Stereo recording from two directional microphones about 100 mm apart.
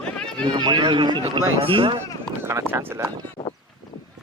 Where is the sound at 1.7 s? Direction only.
60° right (ahead or behind).